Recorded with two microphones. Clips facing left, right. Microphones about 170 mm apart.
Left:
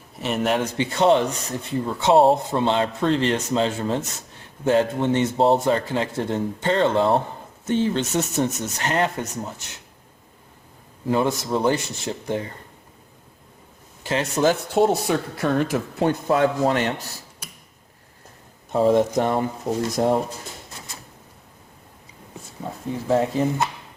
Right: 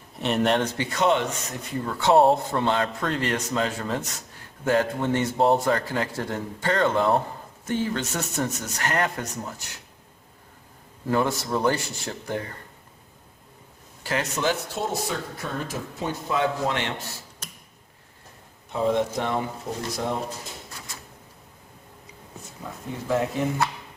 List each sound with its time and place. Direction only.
0.2 s speech: centre (ahead or behind)
0.8 s speech: 30° left (ahead or behind)
1.8 s a man's voice: 20° left (ahead or behind)
11.1 s a man's voice: 20° left (ahead or behind)
14.0 s speech: 25° left (ahead or behind)
14.4 s speech: 60° left (ahead or behind); by 16.9 s 40° left (ahead or behind)
17.4 s arrow: 10° left (ahead or behind)
18.7 s speech: 45° left (ahead or behind)
22.6 s speech: 30° left (ahead or behind)